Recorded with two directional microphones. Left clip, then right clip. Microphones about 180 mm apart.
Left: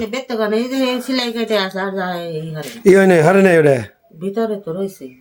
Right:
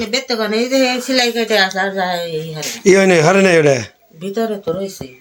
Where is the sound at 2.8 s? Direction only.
25° left (ahead or behind).